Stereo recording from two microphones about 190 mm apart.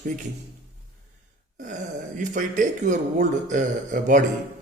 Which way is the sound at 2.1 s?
40° right (ahead or behind).